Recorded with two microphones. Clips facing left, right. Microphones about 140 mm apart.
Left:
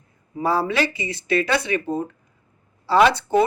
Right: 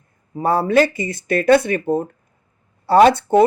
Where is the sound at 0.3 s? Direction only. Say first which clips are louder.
Right 6 dB; 50° right (ahead or behind).